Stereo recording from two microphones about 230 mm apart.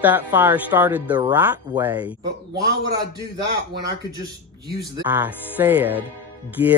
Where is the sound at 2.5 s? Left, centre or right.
Right.